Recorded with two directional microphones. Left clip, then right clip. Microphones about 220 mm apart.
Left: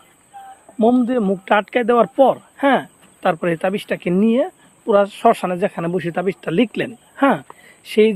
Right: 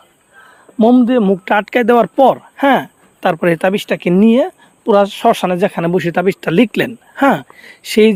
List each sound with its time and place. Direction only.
0.8 s speech: 50° right (ahead or behind)